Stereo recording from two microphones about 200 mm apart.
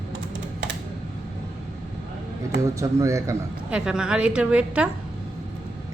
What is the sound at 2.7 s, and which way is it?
Speech, 15° right (ahead or behind).